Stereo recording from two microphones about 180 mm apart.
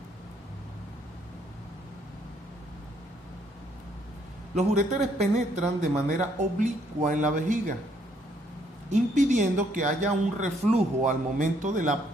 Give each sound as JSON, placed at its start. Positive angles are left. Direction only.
{"t": 4.5, "sound": "speech", "side_deg": -40}
{"t": 8.9, "sound": "speech", "side_deg": -40}